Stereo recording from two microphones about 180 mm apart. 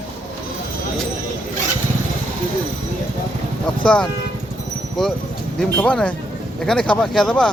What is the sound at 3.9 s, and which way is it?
Speech, 5° left (ahead or behind).